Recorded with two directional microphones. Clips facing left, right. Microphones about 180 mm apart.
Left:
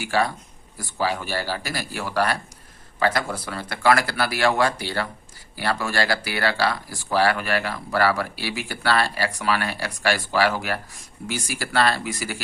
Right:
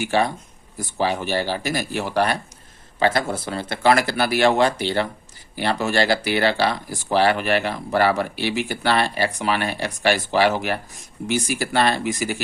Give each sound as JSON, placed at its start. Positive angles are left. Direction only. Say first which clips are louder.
{"t": 0.0, "sound": "speech", "louder": "right 3 dB", "side_deg": -20}